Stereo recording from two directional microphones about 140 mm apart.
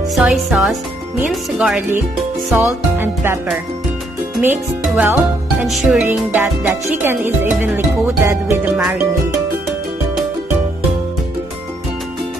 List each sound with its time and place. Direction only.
0.1 s speech: 5° right (ahead or behind); by 8.8 s 20° right (ahead or behind)